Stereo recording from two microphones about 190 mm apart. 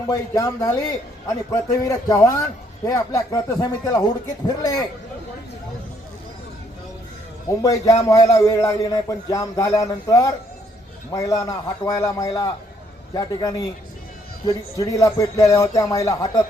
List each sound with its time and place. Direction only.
0.1 s a man's voice: 20° left (ahead or behind)
7.6 s a man's voice: 15° left (ahead or behind)